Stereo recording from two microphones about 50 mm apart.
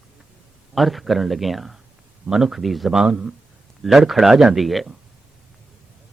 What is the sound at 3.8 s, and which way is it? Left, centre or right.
A man's voice, centre.